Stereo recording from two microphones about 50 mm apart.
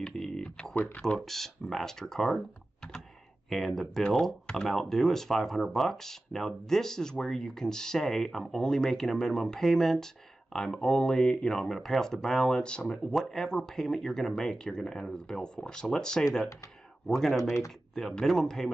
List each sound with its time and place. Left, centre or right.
0.0 s a sound: centre
1.0 s speech: centre
3.4 s speech: centre